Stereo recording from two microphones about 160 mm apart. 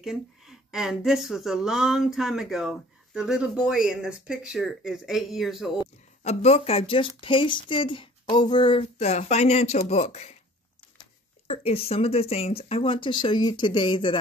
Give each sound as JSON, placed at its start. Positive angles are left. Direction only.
{"t": 0.0, "sound": "speech", "side_deg": -5}
{"t": 6.2, "sound": "a woman's voice", "side_deg": 40}
{"t": 11.4, "sound": "a woman's voice", "side_deg": 40}